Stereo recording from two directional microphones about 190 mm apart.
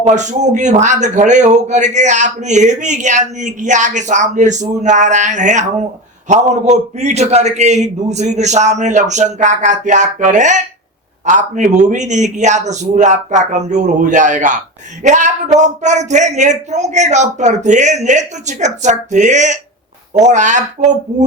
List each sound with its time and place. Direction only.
0.0 s a man's voice: 40° right (ahead or behind)